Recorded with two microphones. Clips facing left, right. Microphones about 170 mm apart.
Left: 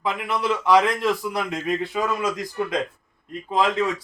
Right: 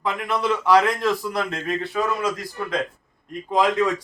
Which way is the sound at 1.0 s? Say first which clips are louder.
Right 1 dB; 10° left (ahead or behind).